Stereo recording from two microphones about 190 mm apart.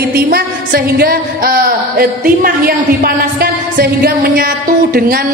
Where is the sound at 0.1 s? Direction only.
55° right (ahead or behind).